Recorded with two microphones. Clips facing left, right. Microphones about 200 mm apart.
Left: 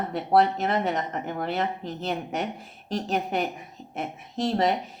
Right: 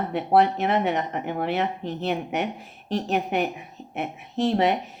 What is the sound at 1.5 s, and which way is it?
Speech, centre (ahead or behind).